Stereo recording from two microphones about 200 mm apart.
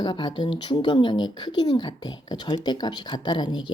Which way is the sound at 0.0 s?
25° left (ahead or behind).